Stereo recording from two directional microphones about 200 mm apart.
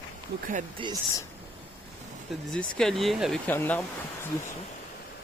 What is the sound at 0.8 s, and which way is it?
Speech, 25° right (ahead or behind).